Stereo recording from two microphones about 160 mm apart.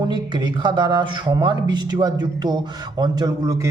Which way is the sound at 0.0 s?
30° right (ahead or behind).